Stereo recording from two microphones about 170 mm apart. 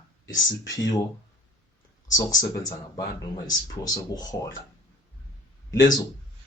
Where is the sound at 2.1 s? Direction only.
20° left (ahead or behind).